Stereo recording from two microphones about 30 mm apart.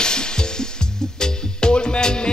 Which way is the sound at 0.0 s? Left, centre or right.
Left.